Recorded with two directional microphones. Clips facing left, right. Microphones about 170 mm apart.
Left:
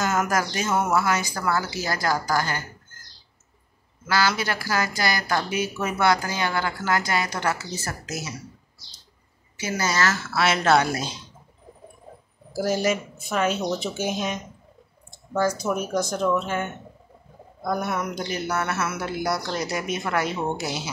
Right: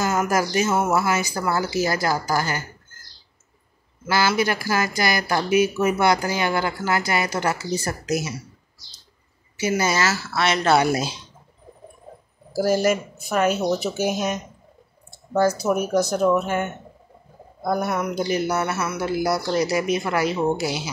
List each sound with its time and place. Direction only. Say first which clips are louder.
0.0 s speech: right 2 dB; 5° right (ahead or behind)
4.1 s speech: right 3 dB; 10° right (ahead or behind)
9.6 s speech: right 4 dB; 15° right (ahead or behind); by 10.8 s 5° left (ahead or behind)
10.8 s speech: right 4 dB; 10° right (ahead or behind)
12.9 s speech: right 3 dB; centre (ahead or behind)
15.3 s speech: right 4 dB; 35° right (ahead or behind)
15.7 s speech: right 5 dB; 10° right (ahead or behind)